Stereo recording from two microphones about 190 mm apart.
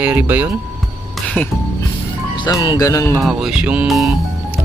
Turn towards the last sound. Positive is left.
turn(degrees=0)  # may be behind; listen again after turning